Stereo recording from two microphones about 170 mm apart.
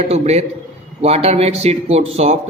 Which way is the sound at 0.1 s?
40° right (ahead or behind).